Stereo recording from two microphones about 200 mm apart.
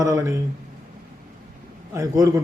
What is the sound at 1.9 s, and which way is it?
Speech, 15° right (ahead or behind).